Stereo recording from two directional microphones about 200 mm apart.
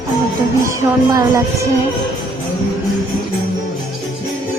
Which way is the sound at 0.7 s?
15° right (ahead or behind).